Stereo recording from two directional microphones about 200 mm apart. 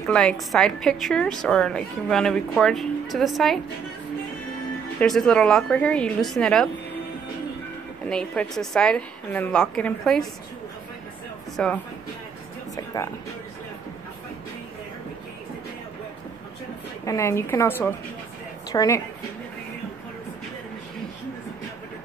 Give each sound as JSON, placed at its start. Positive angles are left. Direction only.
{"t": 0.0, "sound": "a woman's voice", "side_deg": 5}
{"t": 5.0, "sound": "a woman's voice", "side_deg": 0}
{"t": 8.1, "sound": "a woman's voice", "side_deg": 5}
{"t": 11.5, "sound": "a woman's voice", "side_deg": 5}
{"t": 12.7, "sound": "speech", "side_deg": 15}
{"t": 17.0, "sound": "a woman's voice", "side_deg": 15}